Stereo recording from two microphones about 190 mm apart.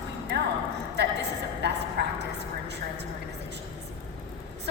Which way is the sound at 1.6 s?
65° right (ahead or behind).